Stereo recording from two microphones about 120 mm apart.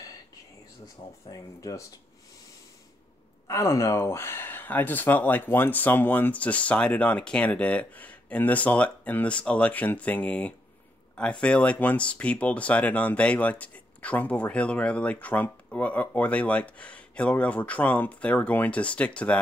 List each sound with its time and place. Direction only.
1.3 s speech: 30° left (ahead or behind)
3.4 s speech: 25° left (ahead or behind); by 19.3 s 10° left (ahead or behind)